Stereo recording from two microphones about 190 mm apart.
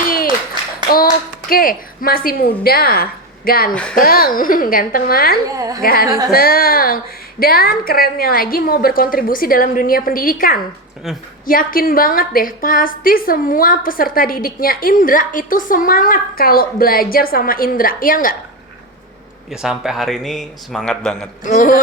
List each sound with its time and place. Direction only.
1.5 s a woman's voice: 50° left (ahead or behind)
5.5 s a woman's voice: 20° right (ahead or behind)
5.8 s a woman's voice: 50° left (ahead or behind)
19.5 s a man's voice: centre (ahead or behind)
21.4 s a woman's voice: 40° left (ahead or behind)